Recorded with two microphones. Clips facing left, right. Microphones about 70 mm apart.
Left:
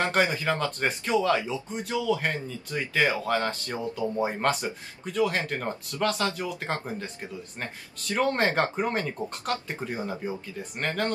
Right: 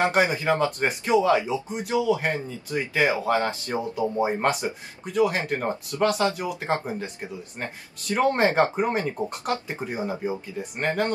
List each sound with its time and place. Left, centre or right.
0.0 s speech: centre